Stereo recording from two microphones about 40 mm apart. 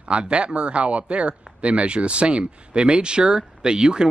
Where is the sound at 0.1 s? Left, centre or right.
Right.